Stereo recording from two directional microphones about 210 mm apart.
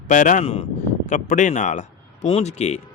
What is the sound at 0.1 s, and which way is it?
A man's voice, 35° left (ahead or behind).